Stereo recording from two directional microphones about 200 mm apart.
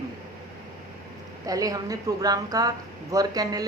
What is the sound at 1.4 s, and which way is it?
A woman's voice, 15° right (ahead or behind).